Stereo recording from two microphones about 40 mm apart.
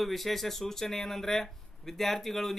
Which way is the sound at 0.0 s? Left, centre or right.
Centre.